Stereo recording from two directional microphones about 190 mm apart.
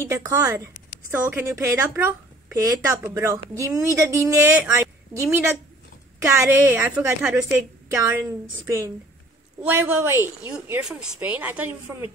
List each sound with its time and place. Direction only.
0.0 s speech: 15° right (ahead or behind)
4.7 s a sound: 15° right (ahead or behind)
6.2 s speech: 15° right (ahead or behind)